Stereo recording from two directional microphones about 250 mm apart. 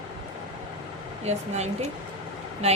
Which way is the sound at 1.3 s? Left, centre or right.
Right.